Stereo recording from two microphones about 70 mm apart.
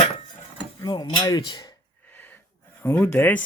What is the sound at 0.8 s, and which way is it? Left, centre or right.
Speech, left.